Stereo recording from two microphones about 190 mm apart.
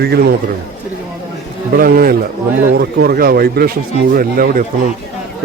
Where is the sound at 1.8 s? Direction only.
50° right (ahead or behind).